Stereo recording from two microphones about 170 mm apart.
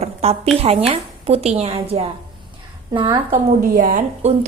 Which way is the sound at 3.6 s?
55° right (ahead or behind).